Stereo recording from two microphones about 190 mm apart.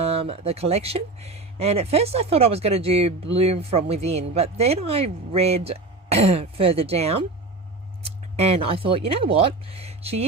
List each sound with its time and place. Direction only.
0.0 s speech: 30° right (ahead or behind)